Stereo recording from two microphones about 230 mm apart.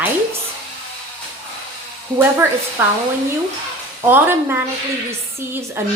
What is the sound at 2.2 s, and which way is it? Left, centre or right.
Speech, centre.